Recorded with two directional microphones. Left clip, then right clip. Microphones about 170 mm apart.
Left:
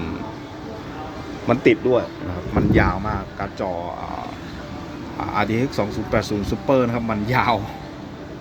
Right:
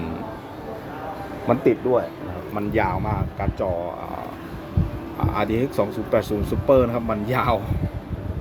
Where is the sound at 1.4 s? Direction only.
5° right (ahead or behind).